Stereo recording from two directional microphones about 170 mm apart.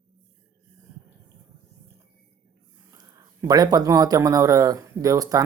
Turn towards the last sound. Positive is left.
turn(degrees=-20)  # may be behind; listen again after turning